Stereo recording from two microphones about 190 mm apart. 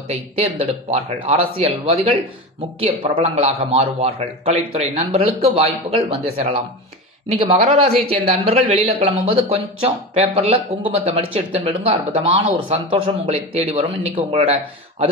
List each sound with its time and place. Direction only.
0.1 s a man's voice: 35° right (ahead or behind)